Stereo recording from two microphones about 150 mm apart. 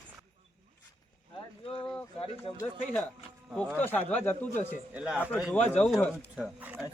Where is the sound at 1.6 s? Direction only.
40° left (ahead or behind).